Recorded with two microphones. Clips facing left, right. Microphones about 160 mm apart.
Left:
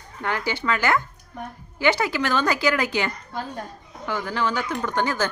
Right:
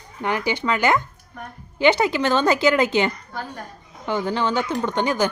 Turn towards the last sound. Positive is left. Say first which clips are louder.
# right 3 dB
turn(degrees=-15)  # may be behind; listen again after turning